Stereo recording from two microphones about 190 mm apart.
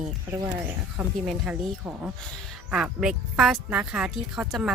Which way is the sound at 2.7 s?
5° right (ahead or behind).